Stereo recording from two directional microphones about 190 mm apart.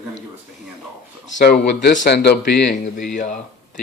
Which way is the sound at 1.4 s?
60° left (ahead or behind).